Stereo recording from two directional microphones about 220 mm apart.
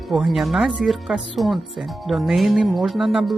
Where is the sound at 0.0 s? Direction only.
Centre (ahead or behind).